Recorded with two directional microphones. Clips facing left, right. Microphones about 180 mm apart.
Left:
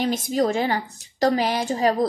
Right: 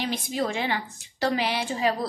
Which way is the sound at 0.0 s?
45° left (ahead or behind).